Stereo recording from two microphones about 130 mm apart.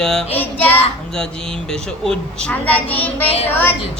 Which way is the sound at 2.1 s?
10° left (ahead or behind).